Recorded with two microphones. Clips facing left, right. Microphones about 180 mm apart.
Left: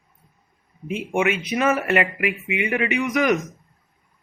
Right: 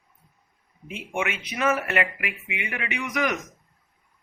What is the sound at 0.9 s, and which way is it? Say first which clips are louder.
Speech: left 7 dB; 15° left (ahead or behind).